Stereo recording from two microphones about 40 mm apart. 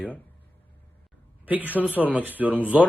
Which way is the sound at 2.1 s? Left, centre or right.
Right.